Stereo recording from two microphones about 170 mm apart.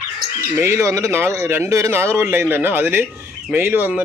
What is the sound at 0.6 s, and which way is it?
Speech, 15° right (ahead or behind).